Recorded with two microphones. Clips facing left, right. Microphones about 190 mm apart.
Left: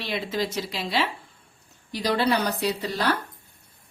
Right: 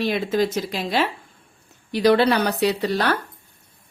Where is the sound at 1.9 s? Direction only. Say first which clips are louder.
Right 7 dB; 65° right (ahead or behind).